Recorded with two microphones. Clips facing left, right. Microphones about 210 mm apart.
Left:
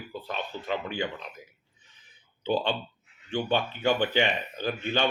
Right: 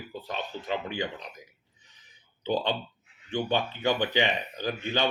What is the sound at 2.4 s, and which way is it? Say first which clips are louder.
Speech: left 1 dB; 20° right (ahead or behind).